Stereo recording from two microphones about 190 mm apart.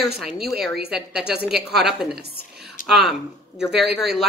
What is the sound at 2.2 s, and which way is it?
Speech, 55° right (ahead or behind).